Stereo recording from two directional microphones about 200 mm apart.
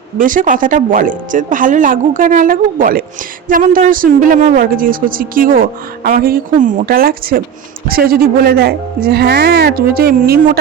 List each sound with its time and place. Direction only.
0.2 s speech: 40° right (ahead or behind)